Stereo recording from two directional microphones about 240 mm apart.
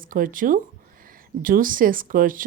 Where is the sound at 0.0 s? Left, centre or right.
Right.